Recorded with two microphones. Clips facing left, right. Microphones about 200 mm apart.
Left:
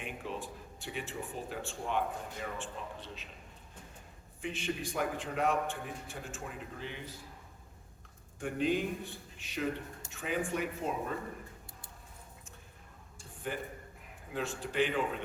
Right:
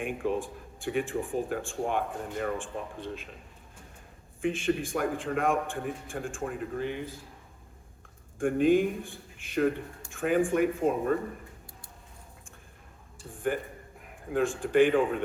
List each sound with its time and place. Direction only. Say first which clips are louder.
0.0 s speech: right 10 dB; 50° right (ahead or behind)
4.4 s speech: right 9 dB; 50° right (ahead or behind)
8.4 s speech: right 9 dB; 50° right (ahead or behind)
13.5 s speech: right 8 dB; 50° right (ahead or behind)